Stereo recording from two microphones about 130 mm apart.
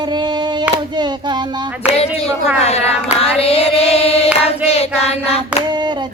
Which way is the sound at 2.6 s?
55° left (ahead or behind).